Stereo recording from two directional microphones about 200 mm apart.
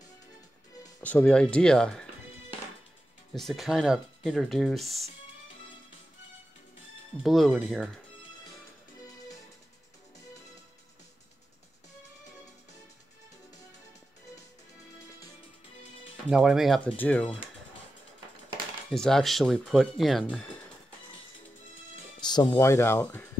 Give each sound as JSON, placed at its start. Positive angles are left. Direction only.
{"t": 1.0, "sound": "speech", "side_deg": 5}
{"t": 3.3, "sound": "speech", "side_deg": 0}
{"t": 7.2, "sound": "speech", "side_deg": 0}
{"t": 16.3, "sound": "speech", "side_deg": -5}
{"t": 18.9, "sound": "speech", "side_deg": 0}
{"t": 22.3, "sound": "speech", "side_deg": 20}